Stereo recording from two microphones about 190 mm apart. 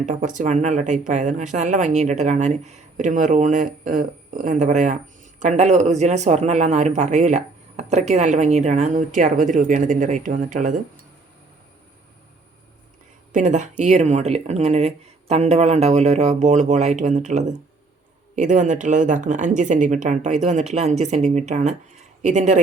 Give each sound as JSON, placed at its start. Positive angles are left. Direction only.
{"t": 0.0, "sound": "speech", "side_deg": -40}
{"t": 13.3, "sound": "speech", "side_deg": -40}